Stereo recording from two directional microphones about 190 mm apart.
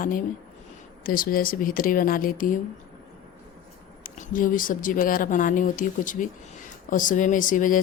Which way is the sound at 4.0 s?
45° left (ahead or behind).